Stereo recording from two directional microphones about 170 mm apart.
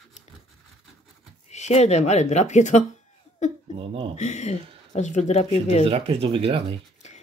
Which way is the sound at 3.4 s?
45° left (ahead or behind).